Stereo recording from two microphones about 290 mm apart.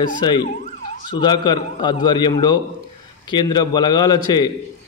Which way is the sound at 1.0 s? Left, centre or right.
Centre.